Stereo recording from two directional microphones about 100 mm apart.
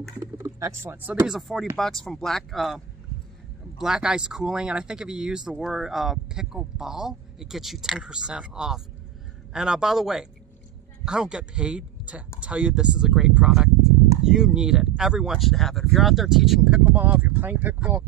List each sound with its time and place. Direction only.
0.4 s speech: 30° right (ahead or behind)
1.2 s speech: 5° right (ahead or behind)
16.8 s speech: 15° right (ahead or behind)